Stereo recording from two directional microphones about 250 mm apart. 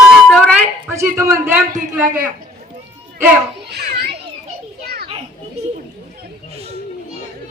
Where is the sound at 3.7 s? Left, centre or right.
Right.